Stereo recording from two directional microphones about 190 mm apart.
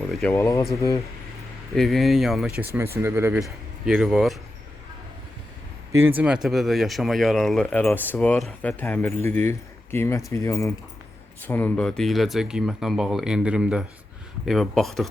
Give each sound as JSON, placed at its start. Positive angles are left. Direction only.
{"t": 0.1, "sound": "speech", "side_deg": 5}
{"t": 1.7, "sound": "speech", "side_deg": 0}
{"t": 2.6, "sound": "speech", "side_deg": -15}
{"t": 5.9, "sound": "speech", "side_deg": -10}